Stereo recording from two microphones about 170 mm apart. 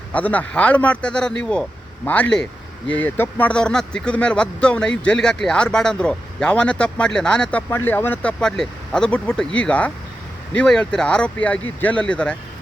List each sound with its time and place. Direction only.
0.1 s speech: 10° left (ahead or behind)